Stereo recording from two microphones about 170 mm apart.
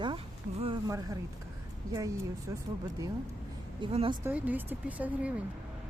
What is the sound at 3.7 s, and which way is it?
Speech, 30° right (ahead or behind).